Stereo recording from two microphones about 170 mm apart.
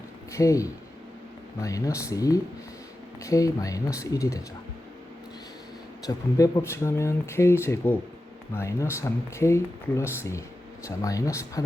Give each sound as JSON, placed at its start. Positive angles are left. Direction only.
{"t": 0.3, "sound": "speech", "side_deg": 20}
{"t": 6.1, "sound": "speech", "side_deg": 20}